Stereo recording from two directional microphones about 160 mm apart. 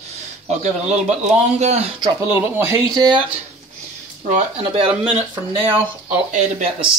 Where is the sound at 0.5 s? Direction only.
45° right (ahead or behind).